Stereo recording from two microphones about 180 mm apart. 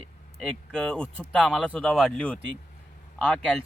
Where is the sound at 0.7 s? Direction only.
5° left (ahead or behind).